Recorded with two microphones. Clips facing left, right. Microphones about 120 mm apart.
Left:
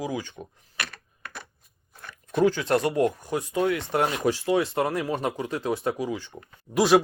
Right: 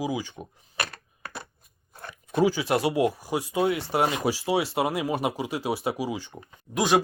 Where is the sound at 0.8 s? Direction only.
30° right (ahead or behind).